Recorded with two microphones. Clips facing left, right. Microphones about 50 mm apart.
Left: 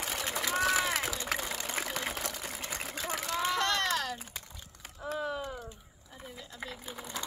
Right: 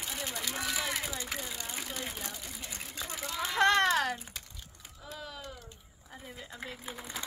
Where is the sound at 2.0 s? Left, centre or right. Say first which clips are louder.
Left 4 dB; left.